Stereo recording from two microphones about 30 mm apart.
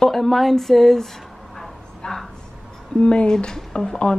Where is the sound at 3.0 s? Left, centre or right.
Left.